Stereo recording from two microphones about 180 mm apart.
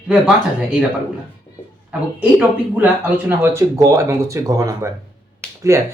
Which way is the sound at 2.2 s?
10° right (ahead or behind).